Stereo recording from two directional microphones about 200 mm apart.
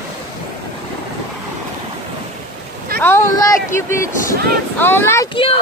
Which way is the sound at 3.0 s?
15° left (ahead or behind).